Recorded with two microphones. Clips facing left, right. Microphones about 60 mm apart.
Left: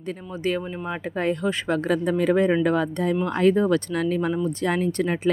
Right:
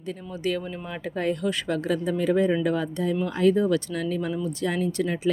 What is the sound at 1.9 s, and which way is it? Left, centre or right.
Speech, left.